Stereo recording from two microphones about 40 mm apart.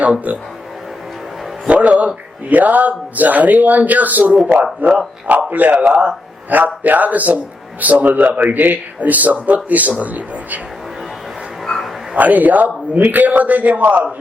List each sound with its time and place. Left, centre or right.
0.0 s a man's voice: right
1.6 s speech: right
5.9 s a man's voice: right
12.1 s speech: right